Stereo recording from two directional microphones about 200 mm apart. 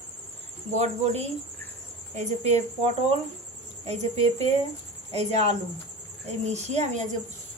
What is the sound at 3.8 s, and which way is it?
A woman's voice, 30° right (ahead or behind).